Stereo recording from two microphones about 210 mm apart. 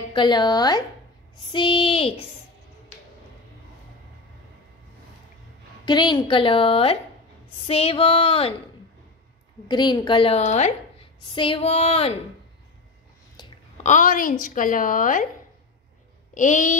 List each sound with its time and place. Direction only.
0.1 s a woman's voice: 20° left (ahead or behind)
5.9 s a woman's voice: 20° left (ahead or behind)
9.7 s a woman's voice: 20° left (ahead or behind)
13.8 s a woman's voice: 40° left (ahead or behind)
16.3 s a woman's voice: 35° left (ahead or behind)